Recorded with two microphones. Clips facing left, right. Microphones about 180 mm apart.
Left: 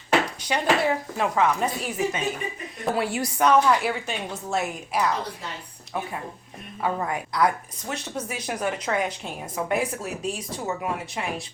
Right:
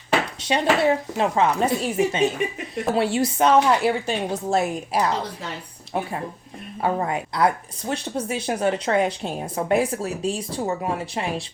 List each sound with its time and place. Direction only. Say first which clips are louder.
0.4 s speech: right 3 dB; 25° right (ahead or behind)
6.8 s speech: right 3 dB; 30° right (ahead or behind)